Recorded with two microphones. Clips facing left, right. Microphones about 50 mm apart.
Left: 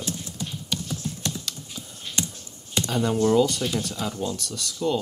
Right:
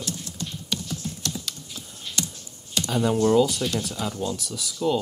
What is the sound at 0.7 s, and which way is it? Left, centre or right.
Typing, centre.